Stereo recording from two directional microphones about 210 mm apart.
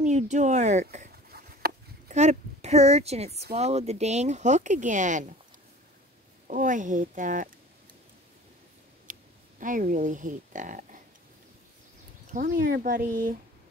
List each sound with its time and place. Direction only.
0.0 s speech: 35° right (ahead or behind)
1.3 s a sound: 45° right (ahead or behind)
2.1 s speech: 30° right (ahead or behind)
6.4 s speech: 40° right (ahead or behind)
9.6 s speech: 40° right (ahead or behind)
12.3 s speech: 40° right (ahead or behind)